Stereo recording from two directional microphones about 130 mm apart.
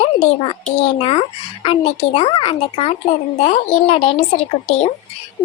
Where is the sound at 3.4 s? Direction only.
55° left (ahead or behind).